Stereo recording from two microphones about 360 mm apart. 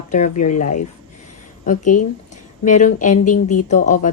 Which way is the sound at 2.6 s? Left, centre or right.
Left.